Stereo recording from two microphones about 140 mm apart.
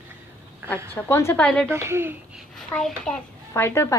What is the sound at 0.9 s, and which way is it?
Speech, 20° left (ahead or behind).